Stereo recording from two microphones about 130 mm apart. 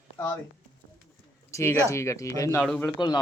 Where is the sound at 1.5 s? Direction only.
20° left (ahead or behind).